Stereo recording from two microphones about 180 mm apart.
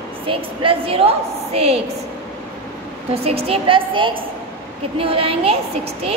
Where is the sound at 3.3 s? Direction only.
35° right (ahead or behind).